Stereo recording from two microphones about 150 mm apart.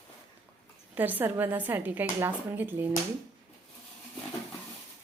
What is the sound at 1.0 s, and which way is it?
Speech, 10° right (ahead or behind).